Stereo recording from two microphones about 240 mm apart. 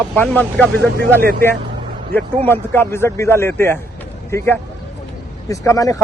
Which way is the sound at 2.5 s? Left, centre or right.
Centre.